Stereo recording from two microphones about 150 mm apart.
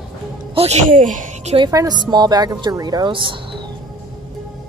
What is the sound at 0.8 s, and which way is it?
Speech, 60° right (ahead or behind).